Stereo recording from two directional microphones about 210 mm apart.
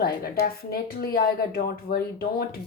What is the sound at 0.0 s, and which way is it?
A woman's voice, 45° left (ahead or behind).